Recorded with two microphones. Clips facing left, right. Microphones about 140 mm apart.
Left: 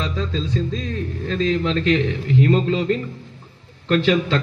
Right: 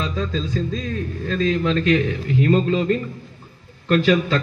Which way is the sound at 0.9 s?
30° left (ahead or behind).